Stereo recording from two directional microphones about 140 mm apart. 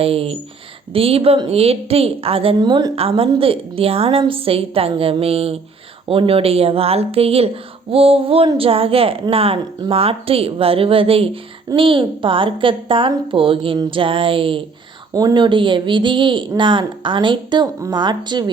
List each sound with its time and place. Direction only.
0.0 s a woman's voice: 45° right (ahead or behind)
15.1 s a woman's voice: 30° right (ahead or behind)
17.7 s speech: 20° right (ahead or behind)
18.0 s a woman's voice: 30° right (ahead or behind)